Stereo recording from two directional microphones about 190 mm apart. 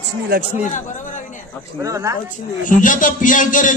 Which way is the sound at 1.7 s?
15° right (ahead or behind).